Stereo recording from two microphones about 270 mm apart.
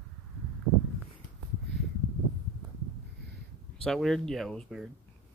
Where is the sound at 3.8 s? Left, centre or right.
Centre.